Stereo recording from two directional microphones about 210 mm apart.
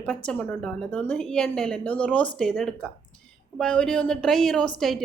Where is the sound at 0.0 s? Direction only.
5° left (ahead or behind).